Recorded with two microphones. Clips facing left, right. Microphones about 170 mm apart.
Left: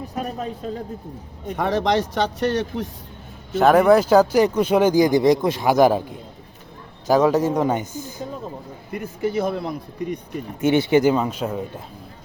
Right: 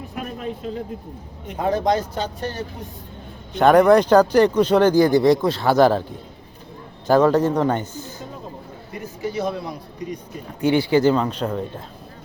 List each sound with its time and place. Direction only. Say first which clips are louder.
0.1 s a sound: even; 40° left (ahead or behind)
1.5 s speech: even; 75° left (ahead or behind)
3.5 s speech: right 1 dB; 5° left (ahead or behind)
7.1 s speech: right 1 dB; 10° left (ahead or behind)
8.9 s speech: left 4 dB; 55° left (ahead or behind)
10.6 s speech: even; 20° left (ahead or behind)
11.1 s speech: right 1 dB; 10° left (ahead or behind)